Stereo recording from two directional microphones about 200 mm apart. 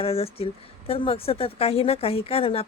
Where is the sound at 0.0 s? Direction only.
30° left (ahead or behind).